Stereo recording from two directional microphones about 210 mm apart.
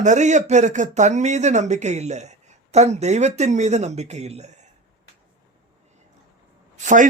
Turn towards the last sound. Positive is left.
turn(degrees=-35)  # may be behind; listen again after turning